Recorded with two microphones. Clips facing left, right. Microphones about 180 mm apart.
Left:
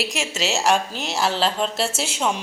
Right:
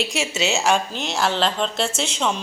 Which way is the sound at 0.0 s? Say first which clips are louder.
Right 2 dB; centre (ahead or behind).